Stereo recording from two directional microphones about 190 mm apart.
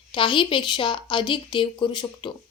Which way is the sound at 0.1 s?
25° left (ahead or behind).